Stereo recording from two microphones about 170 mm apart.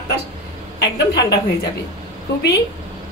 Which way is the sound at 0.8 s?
75° left (ahead or behind).